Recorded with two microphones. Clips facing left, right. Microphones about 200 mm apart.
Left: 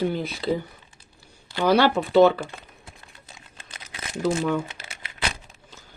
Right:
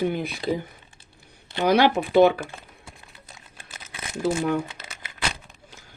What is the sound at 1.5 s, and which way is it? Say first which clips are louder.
Speech: even; 20° right (ahead or behind).